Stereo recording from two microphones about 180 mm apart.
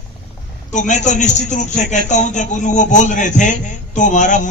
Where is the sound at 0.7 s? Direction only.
45° left (ahead or behind).